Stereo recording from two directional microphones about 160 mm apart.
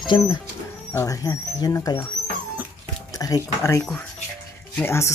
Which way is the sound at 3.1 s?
20° left (ahead or behind).